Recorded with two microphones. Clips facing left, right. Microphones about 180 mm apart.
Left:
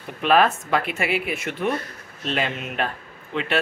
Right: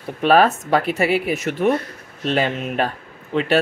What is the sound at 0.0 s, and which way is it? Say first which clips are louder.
A man's voice: right 4 dB; 35° right (ahead or behind).